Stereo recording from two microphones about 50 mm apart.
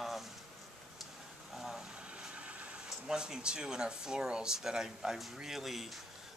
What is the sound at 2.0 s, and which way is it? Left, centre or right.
Vehicle, right.